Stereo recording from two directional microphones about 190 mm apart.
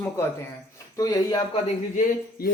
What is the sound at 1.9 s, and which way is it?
Speech, 45° left (ahead or behind).